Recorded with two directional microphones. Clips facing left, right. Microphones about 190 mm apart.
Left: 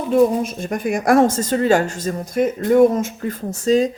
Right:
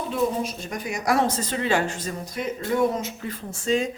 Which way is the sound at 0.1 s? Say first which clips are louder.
Left 11 dB; 50° left (ahead or behind).